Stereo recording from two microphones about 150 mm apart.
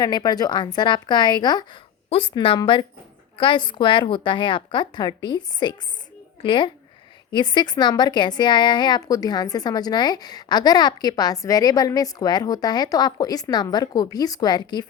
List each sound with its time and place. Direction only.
0.0 s speech: 25° left (ahead or behind)
2.0 s a woman's voice: 40° left (ahead or behind)